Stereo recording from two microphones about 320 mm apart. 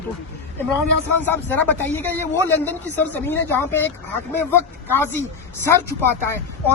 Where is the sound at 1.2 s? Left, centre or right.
Centre.